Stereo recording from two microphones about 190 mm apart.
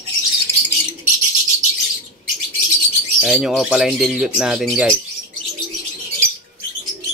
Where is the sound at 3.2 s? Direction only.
Centre (ahead or behind).